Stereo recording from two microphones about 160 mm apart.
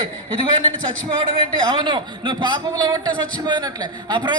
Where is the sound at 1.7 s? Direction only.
30° right (ahead or behind).